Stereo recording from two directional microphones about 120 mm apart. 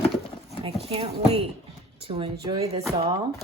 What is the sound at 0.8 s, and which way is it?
Speech, 55° right (ahead or behind).